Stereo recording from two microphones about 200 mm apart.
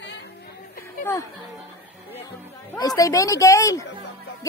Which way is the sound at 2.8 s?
15° left (ahead or behind).